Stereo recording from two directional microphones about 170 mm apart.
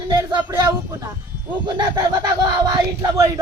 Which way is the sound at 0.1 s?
25° right (ahead or behind).